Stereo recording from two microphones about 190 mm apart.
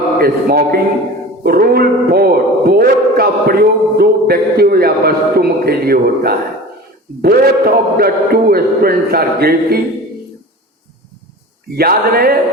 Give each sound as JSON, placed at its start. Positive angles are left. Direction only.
{"t": 0.2, "sound": "a man's voice", "side_deg": -50}
{"t": 11.8, "sound": "a man's voice", "side_deg": -55}